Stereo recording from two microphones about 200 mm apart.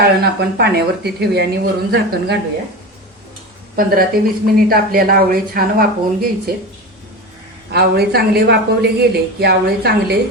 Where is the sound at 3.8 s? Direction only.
45° right (ahead or behind).